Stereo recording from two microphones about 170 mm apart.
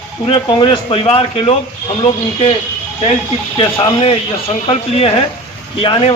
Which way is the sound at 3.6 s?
30° left (ahead or behind).